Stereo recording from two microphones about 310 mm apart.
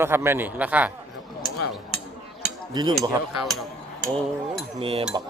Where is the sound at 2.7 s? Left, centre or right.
Centre.